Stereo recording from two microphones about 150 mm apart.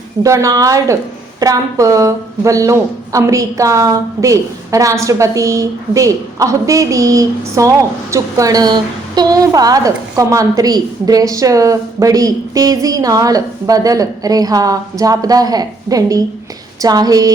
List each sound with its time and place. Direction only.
0.2 s a woman's voice: 20° right (ahead or behind)